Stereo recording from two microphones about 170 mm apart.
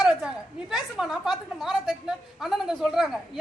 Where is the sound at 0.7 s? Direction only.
5° right (ahead or behind).